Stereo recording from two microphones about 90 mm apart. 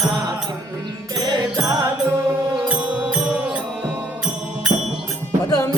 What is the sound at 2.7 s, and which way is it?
Music, 10° right (ahead or behind).